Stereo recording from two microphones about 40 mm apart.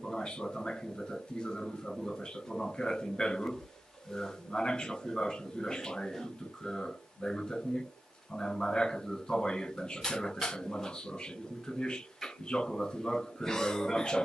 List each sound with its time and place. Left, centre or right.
0.0 s speech: centre